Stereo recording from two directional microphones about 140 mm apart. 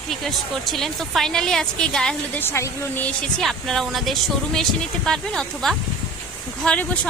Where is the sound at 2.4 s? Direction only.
15° left (ahead or behind).